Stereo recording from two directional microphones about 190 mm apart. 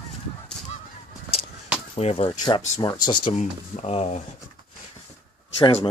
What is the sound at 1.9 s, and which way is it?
Speech, 30° left (ahead or behind).